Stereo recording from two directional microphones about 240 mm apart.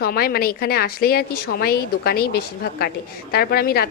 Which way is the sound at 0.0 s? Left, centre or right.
Left.